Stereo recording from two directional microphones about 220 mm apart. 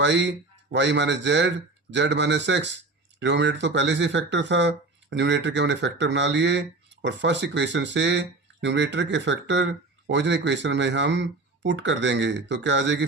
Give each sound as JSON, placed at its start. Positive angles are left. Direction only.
{"t": 0.0, "sound": "speech", "side_deg": -55}